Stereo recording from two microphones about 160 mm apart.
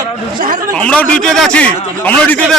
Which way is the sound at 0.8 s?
5° left (ahead or behind).